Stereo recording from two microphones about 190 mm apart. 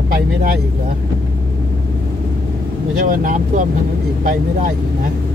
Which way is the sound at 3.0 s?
50° right (ahead or behind).